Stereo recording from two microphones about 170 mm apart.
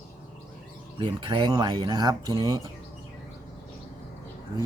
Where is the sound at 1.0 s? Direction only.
25° right (ahead or behind).